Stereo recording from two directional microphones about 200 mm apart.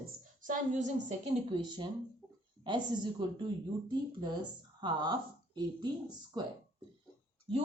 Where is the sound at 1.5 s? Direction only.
25° right (ahead or behind).